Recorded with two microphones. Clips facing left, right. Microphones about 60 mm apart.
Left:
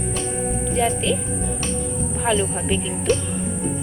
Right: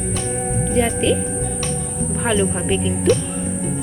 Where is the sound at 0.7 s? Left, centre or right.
Centre.